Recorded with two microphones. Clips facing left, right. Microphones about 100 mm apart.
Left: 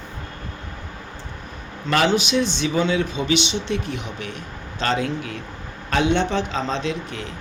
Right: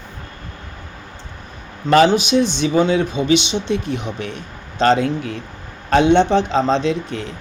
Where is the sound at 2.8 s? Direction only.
50° right (ahead or behind).